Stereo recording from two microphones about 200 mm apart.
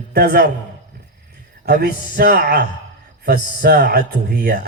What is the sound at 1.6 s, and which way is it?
Speech, 50° right (ahead or behind).